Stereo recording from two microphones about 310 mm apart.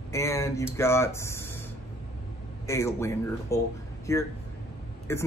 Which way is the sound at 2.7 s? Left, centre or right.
Centre.